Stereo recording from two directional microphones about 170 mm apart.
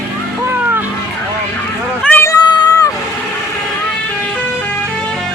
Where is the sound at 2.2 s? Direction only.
25° left (ahead or behind).